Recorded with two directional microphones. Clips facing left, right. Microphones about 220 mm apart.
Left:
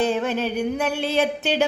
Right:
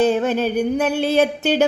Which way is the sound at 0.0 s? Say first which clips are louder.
Right 5 dB; 40° right (ahead or behind).